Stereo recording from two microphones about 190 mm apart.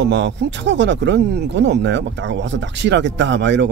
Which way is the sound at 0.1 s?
70° right (ahead or behind).